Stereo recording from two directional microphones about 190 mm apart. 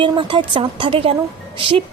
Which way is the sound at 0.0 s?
25° right (ahead or behind).